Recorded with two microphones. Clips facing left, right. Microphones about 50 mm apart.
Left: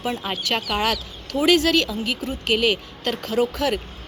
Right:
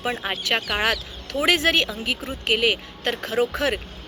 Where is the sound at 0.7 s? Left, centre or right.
Right.